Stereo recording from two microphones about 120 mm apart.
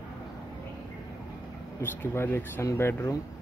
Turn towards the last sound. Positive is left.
turn(degrees=25)  # may be behind; listen again after turning